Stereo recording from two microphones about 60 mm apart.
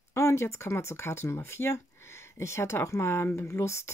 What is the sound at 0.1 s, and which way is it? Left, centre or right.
Speech, left.